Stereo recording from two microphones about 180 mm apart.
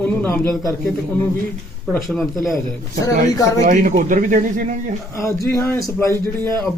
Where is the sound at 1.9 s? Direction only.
5° left (ahead or behind).